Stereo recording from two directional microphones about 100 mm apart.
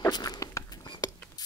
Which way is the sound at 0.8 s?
50° left (ahead or behind).